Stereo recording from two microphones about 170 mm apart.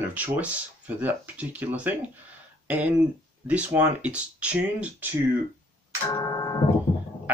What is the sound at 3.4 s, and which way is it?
Speech, 10° right (ahead or behind).